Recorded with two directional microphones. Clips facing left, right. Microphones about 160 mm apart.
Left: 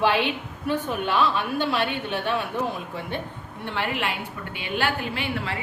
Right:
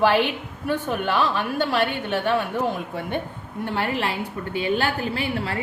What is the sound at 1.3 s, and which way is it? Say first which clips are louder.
Speech: right 2 dB; 45° right (ahead or behind).